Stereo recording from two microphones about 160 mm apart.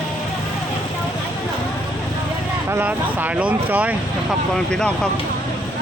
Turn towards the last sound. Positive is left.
turn(degrees=5)  # may be behind; listen again after turning